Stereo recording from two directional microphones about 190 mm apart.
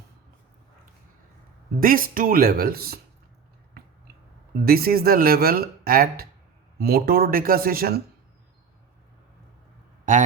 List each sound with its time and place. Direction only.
1.8 s speech: 50° right (ahead or behind)
3.8 s a sound: 55° right (ahead or behind)
4.6 s speech: 50° right (ahead or behind)